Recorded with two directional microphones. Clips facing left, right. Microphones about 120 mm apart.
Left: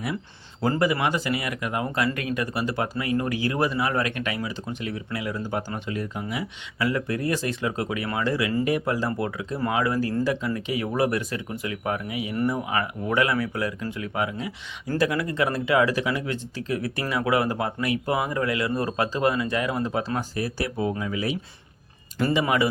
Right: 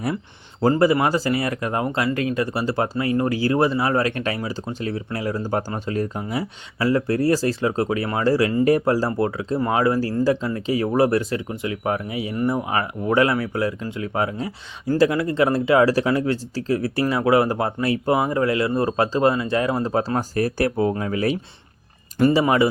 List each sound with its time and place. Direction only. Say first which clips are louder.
0.6 s speech: right 6 dB; 30° right (ahead or behind); by 21.3 s 50° right (ahead or behind)
22.3 s speech: right 4 dB; 30° right (ahead or behind)